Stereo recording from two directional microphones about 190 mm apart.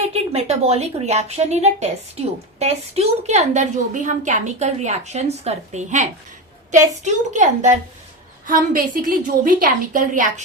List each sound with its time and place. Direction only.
0.1 s a woman's voice: 35° right (ahead or behind)